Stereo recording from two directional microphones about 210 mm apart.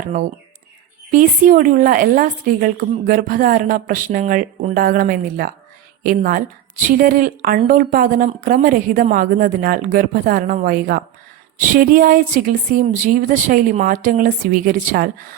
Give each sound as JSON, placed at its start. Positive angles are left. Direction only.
{"t": 1.1, "sound": "a woman's voice", "side_deg": -40}